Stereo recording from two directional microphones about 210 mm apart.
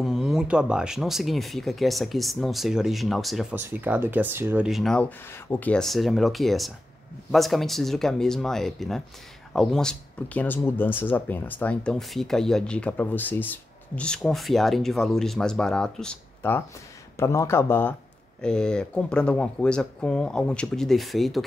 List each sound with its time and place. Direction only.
0.0 s speech: centre (ahead or behind)